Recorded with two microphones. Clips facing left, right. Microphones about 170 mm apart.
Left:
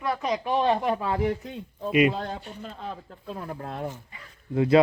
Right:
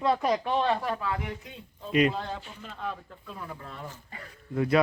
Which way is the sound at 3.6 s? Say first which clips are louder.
Left 8 dB; 60° left (ahead or behind).